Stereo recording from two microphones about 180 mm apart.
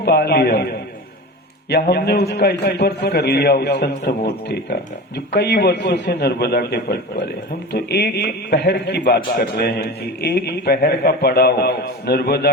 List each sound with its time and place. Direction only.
0.0 s a man's voice: 60° left (ahead or behind)